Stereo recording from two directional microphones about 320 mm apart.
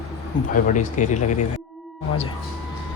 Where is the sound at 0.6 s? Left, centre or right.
Left.